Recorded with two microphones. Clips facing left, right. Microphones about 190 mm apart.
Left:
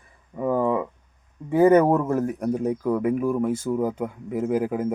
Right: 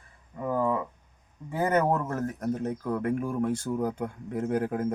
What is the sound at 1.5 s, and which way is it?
Speech, 20° left (ahead or behind).